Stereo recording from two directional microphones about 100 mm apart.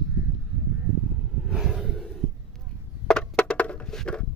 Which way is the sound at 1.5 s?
5° right (ahead or behind).